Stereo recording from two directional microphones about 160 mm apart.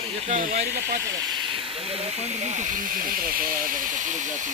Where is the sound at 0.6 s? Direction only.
85° right.